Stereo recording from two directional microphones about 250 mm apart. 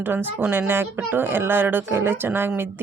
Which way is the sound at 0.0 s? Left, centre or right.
Centre.